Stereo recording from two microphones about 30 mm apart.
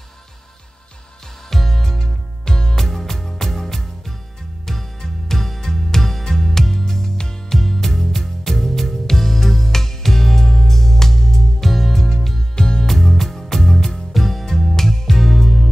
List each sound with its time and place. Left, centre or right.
1.5 s music: centre
2.4 s music: left
2.8 s music: centre
7.4 s music: centre
12.5 s music: left
12.8 s music: centre
13.7 s music: left
14.1 s music: centre